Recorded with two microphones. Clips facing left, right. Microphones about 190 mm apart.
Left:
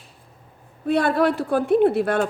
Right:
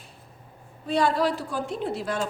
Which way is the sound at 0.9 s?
60° left (ahead or behind).